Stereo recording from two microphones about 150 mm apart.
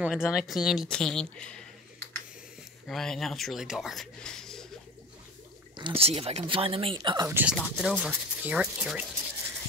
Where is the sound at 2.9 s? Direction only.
Centre (ahead or behind).